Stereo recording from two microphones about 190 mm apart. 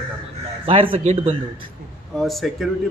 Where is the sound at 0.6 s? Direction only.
30° right (ahead or behind).